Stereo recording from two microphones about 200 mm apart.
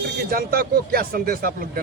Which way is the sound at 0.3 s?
45° right (ahead or behind).